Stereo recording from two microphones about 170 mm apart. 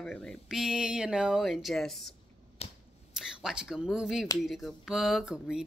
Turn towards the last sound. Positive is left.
turn(degrees=-5)  # may be behind; listen again after turning